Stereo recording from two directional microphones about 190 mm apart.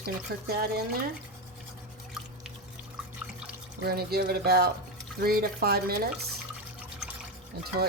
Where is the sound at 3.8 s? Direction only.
55° right (ahead or behind).